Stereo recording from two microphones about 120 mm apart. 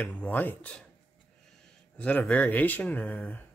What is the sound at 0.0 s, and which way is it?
Speech, 15° left (ahead or behind).